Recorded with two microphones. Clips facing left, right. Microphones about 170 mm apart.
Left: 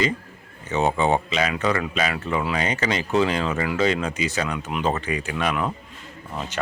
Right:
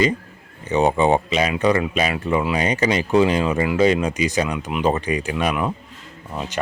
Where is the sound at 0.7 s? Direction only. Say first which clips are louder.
Right 4 dB; 15° right (ahead or behind).